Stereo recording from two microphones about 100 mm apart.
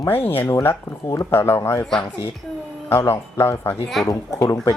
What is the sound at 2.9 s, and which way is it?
Speech, 25° left (ahead or behind).